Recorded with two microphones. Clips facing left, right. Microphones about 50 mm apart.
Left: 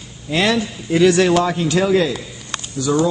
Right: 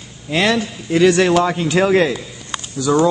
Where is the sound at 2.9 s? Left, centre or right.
Right.